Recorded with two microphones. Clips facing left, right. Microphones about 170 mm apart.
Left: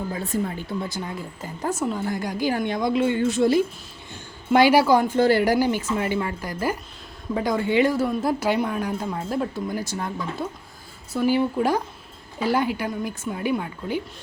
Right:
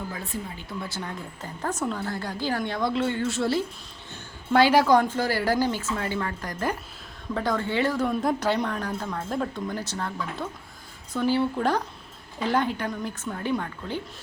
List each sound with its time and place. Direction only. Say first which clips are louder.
0.3 s speech: left 10 dB; 50° left (ahead or behind)
0.9 s speech: left 3 dB; 10° left (ahead or behind)
5.1 s speech: left 6 dB; 25° left (ahead or behind)